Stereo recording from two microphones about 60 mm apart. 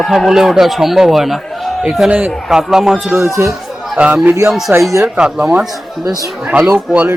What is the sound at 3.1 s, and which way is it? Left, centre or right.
Speech, right.